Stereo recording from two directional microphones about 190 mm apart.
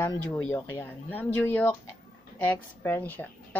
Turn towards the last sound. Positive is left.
turn(degrees=10)  # may be behind; listen again after turning